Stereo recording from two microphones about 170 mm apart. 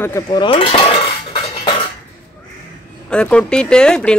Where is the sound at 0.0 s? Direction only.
20° left (ahead or behind).